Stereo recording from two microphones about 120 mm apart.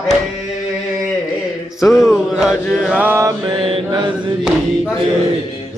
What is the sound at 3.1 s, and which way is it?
Mantra, 25° right (ahead or behind).